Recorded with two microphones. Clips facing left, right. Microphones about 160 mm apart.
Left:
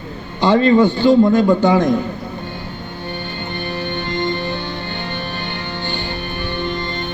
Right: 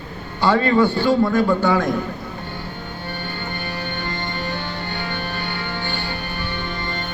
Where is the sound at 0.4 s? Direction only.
20° left (ahead or behind).